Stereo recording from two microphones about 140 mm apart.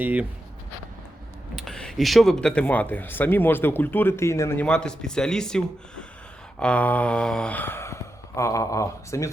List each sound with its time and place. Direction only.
0.0 s speech: 10° right (ahead or behind)
1.5 s speech: 5° left (ahead or behind); by 9.3 s 20° left (ahead or behind)